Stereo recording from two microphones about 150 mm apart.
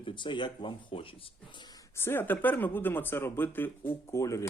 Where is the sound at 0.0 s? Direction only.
35° left (ahead or behind).